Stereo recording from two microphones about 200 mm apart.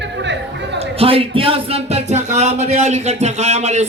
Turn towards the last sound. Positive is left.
turn(degrees=-35)  # may be behind; listen again after turning